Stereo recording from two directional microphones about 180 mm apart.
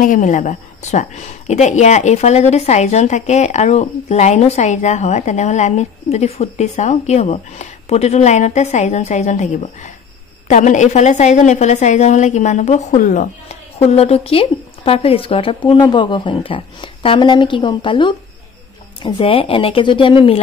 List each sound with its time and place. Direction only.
0.0 s a woman's voice: 45° left (ahead or behind); by 20.3 s 30° left (ahead or behind)